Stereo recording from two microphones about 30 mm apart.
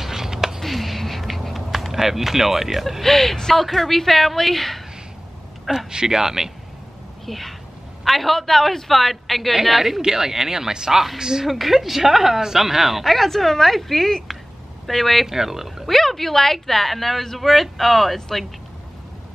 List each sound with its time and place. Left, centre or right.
0.0 s a sound: centre
0.6 s a sound: centre
1.9 s speech: centre
3.0 s a man's voice: centre
5.9 s speech: right
7.2 s a man's voice: centre
10.0 s a woman's voice: centre
11.4 s a man's voice: centre
13.0 s a man's voice: centre
15.2 s speech: centre
15.9 s a man's voice: centre